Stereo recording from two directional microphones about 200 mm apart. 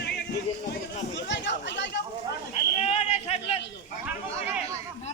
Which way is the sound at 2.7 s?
35° left (ahead or behind).